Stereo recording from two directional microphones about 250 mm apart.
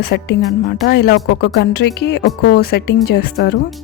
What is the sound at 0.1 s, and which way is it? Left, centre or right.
A woman's voice, left.